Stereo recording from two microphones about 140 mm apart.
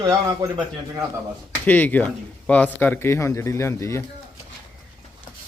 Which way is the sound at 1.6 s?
10° left (ahead or behind).